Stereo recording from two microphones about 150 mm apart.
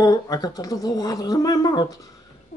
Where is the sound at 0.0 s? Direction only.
25° left (ahead or behind).